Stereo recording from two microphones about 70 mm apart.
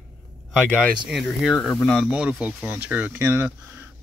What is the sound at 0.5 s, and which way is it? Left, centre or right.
Speech, centre.